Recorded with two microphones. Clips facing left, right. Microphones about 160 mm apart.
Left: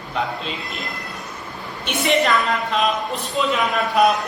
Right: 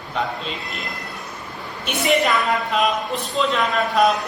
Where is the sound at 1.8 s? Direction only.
Centre (ahead or behind).